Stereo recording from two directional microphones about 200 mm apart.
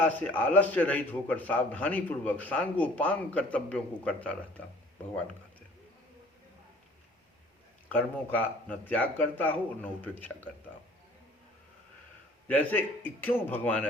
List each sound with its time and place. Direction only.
0.0 s a man's voice: 10° left (ahead or behind)
7.9 s a man's voice: 10° left (ahead or behind)
12.5 s a man's voice: 10° left (ahead or behind)